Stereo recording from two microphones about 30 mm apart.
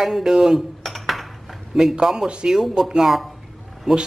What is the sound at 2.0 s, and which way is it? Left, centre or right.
Speech, right.